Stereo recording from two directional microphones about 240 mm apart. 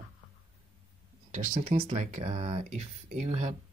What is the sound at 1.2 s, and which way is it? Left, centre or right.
Speech, right.